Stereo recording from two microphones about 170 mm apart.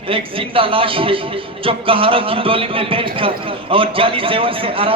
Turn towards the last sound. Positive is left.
turn(degrees=-30)  # may be behind; listen again after turning